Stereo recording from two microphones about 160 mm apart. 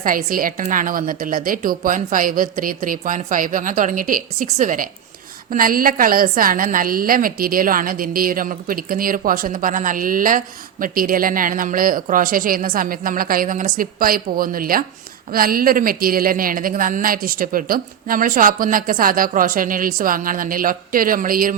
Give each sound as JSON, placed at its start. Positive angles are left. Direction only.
{"t": 0.0, "sound": "a woman's voice", "side_deg": -60}